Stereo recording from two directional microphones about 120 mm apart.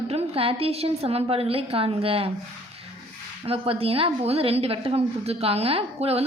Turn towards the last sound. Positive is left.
turn(degrees=-55)  # may be behind; listen again after turning